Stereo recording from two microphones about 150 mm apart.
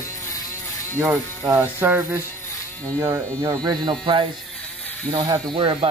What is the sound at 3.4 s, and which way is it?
Speech, 30° right (ahead or behind).